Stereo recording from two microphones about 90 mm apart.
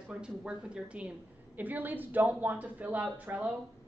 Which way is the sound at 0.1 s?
10° right (ahead or behind).